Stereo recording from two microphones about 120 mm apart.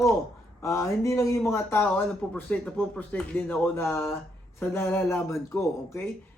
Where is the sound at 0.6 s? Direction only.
25° left (ahead or behind).